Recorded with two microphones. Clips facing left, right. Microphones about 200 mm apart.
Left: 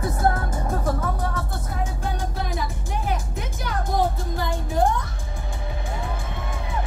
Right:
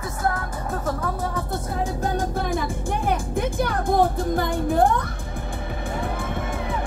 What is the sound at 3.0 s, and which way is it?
Music, 55° right (ahead or behind).